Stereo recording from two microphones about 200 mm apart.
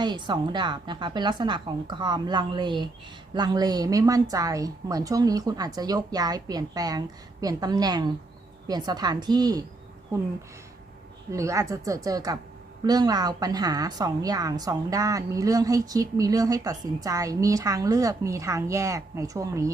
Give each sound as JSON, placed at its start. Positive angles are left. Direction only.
{"t": 0.0, "sound": "a woman's voice", "side_deg": -20}
{"t": 11.3, "sound": "a woman's voice", "side_deg": -15}